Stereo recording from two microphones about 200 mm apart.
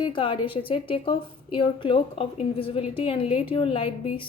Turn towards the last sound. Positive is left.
turn(degrees=25)  # may be behind; listen again after turning